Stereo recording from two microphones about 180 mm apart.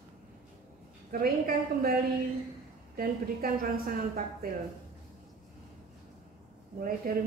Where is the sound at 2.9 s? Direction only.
55° right (ahead or behind).